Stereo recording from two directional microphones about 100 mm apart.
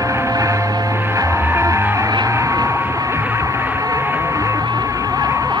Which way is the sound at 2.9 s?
30° right (ahead or behind).